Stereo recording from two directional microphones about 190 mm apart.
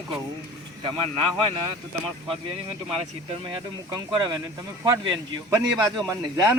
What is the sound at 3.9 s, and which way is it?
Speech, 20° right (ahead or behind).